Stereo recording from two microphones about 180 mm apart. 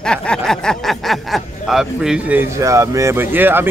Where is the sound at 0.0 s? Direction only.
5° left (ahead or behind).